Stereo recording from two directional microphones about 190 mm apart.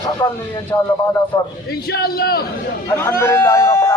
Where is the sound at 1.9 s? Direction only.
55° left (ahead or behind).